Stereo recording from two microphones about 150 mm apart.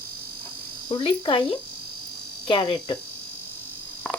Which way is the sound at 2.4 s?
30° left (ahead or behind).